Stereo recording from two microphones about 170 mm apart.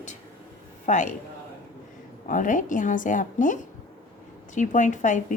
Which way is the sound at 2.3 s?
50° left (ahead or behind).